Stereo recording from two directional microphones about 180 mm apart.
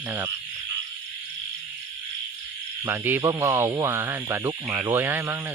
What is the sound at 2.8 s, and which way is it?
Speech, 10° right (ahead or behind).